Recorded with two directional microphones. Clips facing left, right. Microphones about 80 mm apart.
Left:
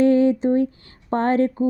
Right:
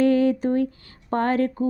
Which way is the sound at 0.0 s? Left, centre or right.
Left.